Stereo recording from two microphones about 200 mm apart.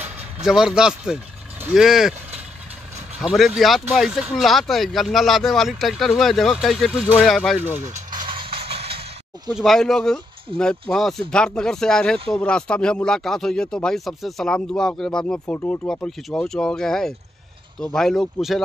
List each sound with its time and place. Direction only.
0.0 s speech: 5° right (ahead or behind)
8.3 s a sound: 25° right (ahead or behind)
9.5 s speech: centre (ahead or behind)